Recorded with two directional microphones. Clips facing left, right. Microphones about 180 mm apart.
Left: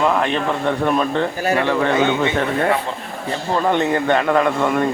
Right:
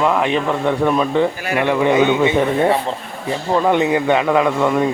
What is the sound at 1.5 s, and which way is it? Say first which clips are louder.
Speech: right 4 dB; 15° right (ahead or behind).